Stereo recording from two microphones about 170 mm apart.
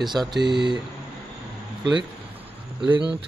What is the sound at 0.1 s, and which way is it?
Speech, 25° right (ahead or behind).